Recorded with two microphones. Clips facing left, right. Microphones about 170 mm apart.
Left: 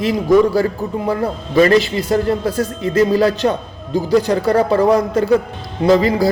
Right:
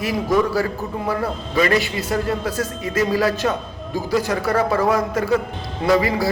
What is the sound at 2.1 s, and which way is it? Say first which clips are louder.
A man's voice: left 6 dB; 35° left (ahead or behind).